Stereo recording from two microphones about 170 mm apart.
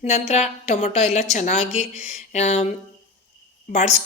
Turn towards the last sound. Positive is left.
turn(degrees=40)  # may be behind; listen again after turning